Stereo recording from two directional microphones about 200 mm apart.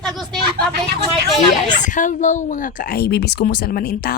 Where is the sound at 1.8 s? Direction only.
40° left (ahead or behind).